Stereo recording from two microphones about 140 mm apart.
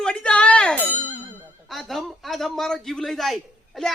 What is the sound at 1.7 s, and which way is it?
A man's voice, centre (ahead or behind).